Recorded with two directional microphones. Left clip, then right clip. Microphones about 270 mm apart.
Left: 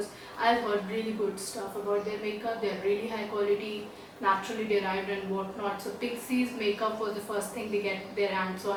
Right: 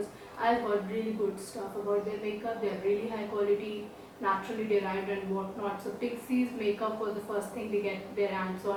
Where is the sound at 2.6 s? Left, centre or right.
Centre.